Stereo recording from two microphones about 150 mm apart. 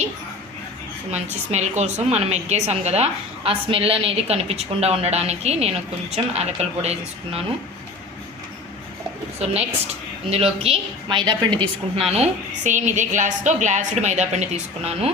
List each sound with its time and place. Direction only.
1.1 s a woman's voice: 50° right (ahead or behind)
9.4 s a woman's voice: 45° right (ahead or behind)